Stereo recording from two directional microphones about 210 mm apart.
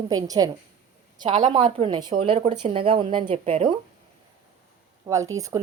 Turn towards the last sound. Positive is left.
turn(degrees=-15)  # may be behind; listen again after turning